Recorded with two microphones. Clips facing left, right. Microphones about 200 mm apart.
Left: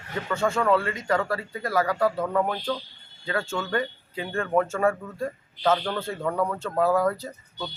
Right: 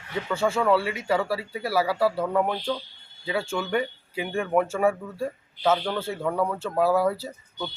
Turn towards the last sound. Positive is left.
turn(degrees=-10)  # may be behind; listen again after turning